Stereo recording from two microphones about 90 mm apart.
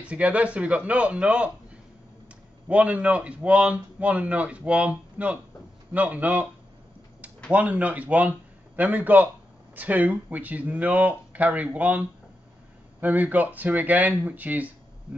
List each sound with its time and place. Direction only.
0.0 s speech: 15° right (ahead or behind)
2.7 s speech: 15° right (ahead or behind)
7.5 s speech: 15° right (ahead or behind)